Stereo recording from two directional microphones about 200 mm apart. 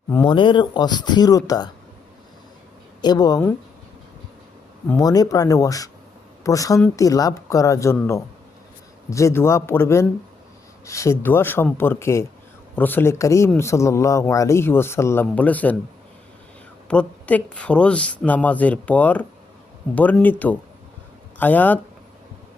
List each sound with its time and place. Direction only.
0.1 s speech: 20° left (ahead or behind)
3.0 s speech: 20° left (ahead or behind)
4.9 s speech: 20° left (ahead or behind)
16.9 s speech: 5° left (ahead or behind)